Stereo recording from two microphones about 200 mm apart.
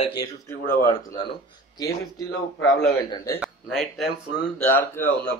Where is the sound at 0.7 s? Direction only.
15° left (ahead or behind).